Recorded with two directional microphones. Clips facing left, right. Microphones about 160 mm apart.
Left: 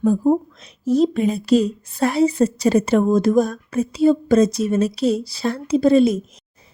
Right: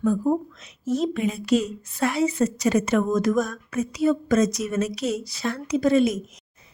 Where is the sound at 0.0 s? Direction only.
30° left (ahead or behind).